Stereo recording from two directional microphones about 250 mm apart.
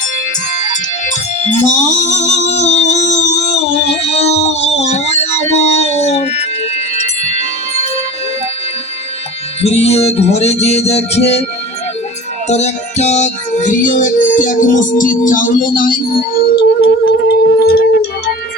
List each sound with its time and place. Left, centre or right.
0.7 s music: left
2.5 s a sound: left
3.5 s music: left
9.6 s music: left
12.5 s music: left